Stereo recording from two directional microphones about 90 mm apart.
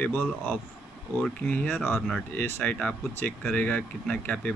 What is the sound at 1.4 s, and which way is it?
Speech, 20° left (ahead or behind).